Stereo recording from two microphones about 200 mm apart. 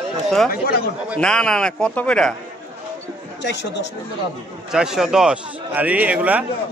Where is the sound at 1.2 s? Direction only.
5° left (ahead or behind).